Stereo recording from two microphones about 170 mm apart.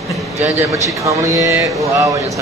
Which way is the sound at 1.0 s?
20° right (ahead or behind).